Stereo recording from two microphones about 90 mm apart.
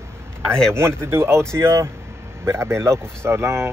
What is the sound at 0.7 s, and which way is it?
Speech, 30° right (ahead or behind).